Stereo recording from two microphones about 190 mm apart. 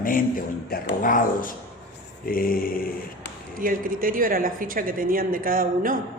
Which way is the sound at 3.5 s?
45° right (ahead or behind).